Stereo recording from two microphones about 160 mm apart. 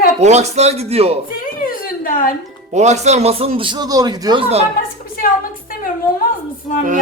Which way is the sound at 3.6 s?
30° right (ahead or behind).